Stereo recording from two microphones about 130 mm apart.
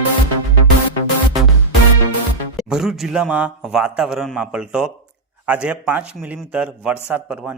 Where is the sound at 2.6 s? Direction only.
5° right (ahead or behind).